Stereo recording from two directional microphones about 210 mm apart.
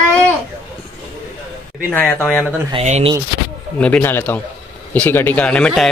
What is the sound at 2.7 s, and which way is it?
Speech, 30° right (ahead or behind).